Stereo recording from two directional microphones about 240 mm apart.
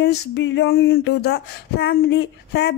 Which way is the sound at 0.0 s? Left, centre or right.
Left.